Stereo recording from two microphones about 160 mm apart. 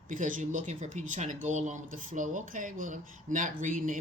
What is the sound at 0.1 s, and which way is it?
Speech, 55° right (ahead or behind).